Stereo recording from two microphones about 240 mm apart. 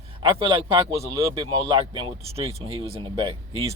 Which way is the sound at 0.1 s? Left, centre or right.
Right.